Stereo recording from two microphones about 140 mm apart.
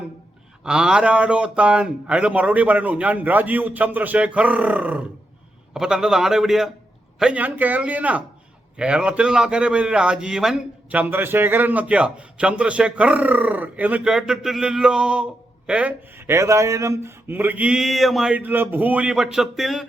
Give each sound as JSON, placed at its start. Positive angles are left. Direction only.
{"t": 0.6, "sound": "a man's voice", "side_deg": -5}